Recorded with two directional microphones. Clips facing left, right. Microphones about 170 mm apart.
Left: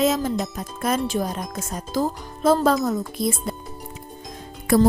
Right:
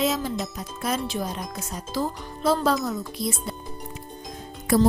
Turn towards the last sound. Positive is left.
turn(degrees=70)  # may be behind; listen again after turning